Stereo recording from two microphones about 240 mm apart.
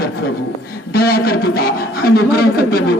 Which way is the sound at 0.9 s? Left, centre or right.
Left.